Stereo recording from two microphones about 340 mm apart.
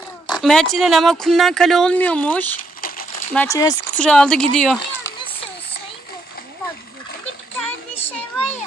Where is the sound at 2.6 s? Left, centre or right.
Left.